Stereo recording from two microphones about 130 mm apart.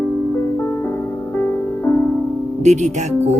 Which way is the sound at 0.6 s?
15° left (ahead or behind).